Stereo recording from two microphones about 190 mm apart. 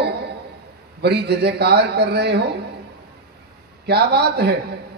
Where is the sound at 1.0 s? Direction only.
60° right (ahead or behind).